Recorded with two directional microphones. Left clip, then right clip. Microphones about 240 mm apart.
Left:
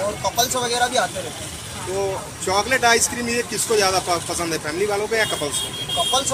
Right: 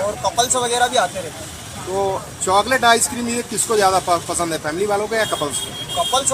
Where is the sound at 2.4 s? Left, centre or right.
Right.